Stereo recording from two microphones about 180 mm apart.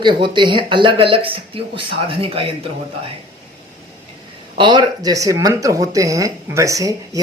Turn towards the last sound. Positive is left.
turn(degrees=-20)  # may be behind; listen again after turning